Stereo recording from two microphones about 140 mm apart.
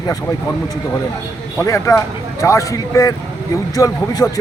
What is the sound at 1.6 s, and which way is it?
Speech, 20° left (ahead or behind).